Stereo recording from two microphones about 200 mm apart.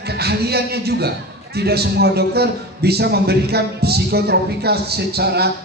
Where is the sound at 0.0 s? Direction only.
55° right (ahead or behind).